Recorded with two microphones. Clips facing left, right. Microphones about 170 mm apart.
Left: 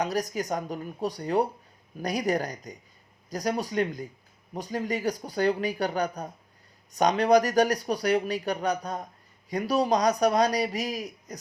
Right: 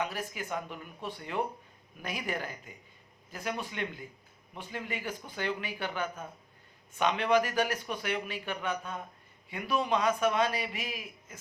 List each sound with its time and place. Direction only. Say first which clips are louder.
0.0 s speech: left 7 dB; 40° left (ahead or behind)